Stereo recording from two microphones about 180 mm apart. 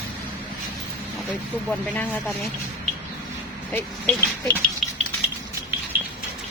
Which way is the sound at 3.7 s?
10° left (ahead or behind).